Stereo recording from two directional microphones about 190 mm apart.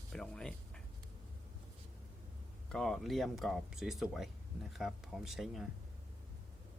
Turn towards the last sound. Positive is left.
turn(degrees=0)  # may be behind; listen again after turning